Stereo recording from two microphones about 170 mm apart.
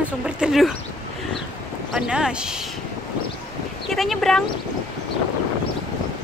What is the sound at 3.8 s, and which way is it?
Speech, centre (ahead or behind).